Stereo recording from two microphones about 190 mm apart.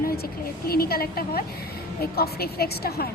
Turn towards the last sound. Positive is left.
turn(degrees=55)  # may be behind; listen again after turning